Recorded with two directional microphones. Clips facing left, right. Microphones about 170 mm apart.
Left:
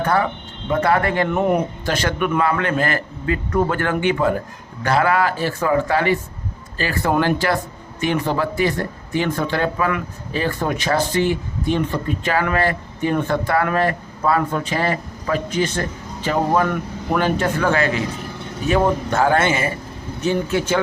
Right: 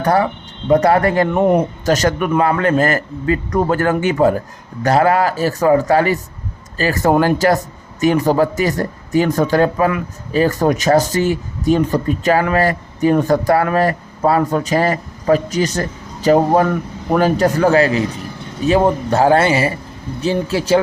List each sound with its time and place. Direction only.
0.0 s speech: 40° right (ahead or behind)